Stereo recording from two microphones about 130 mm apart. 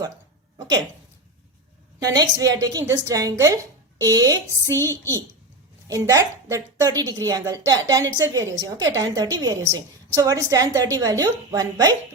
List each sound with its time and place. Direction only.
2.0 s a woman's voice: 30° right (ahead or behind)
5.9 s a woman's voice: 25° right (ahead or behind)